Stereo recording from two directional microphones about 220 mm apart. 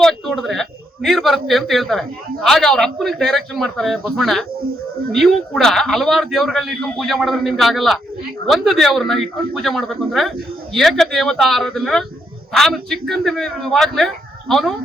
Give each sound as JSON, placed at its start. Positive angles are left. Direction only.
{"t": 0.0, "sound": "a man's voice", "side_deg": 0}